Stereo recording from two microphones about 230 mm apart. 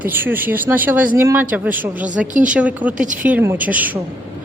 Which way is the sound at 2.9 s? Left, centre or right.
Right.